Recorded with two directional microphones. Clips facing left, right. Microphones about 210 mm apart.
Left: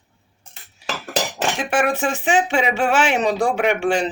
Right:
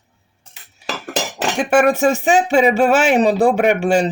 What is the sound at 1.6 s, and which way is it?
Speech, 40° right (ahead or behind).